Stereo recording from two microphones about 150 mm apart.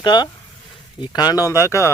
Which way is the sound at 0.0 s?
30° left (ahead or behind).